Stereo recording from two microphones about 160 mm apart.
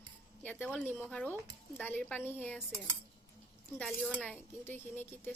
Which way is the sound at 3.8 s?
5° left (ahead or behind).